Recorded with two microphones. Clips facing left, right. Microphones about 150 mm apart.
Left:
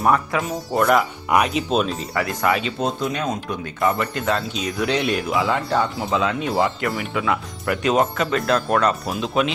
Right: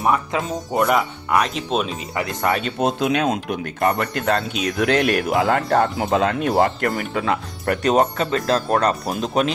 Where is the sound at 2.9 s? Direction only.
75° right (ahead or behind).